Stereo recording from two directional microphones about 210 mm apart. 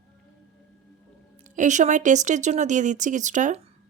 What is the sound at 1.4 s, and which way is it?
Speech, 35° right (ahead or behind).